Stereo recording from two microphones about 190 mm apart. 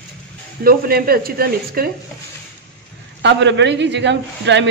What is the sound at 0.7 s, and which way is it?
Speech, 50° right (ahead or behind).